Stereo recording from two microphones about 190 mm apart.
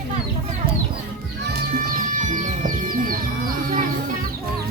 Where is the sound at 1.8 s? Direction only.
45° right (ahead or behind).